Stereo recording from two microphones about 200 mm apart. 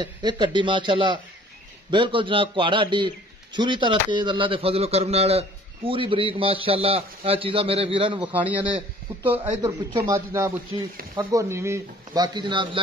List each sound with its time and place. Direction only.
0.0 s a man's voice: 20° right (ahead or behind)
8.2 s a man's voice: 10° right (ahead or behind); by 12.8 s 25° right (ahead or behind)